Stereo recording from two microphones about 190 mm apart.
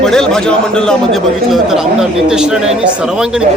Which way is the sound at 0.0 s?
5° left (ahead or behind).